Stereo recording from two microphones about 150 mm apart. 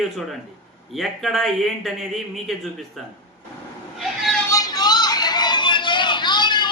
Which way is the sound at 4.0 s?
Centre (ahead or behind).